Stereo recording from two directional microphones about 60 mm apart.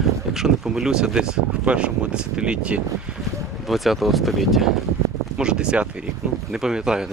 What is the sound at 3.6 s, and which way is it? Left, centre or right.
Speech, centre.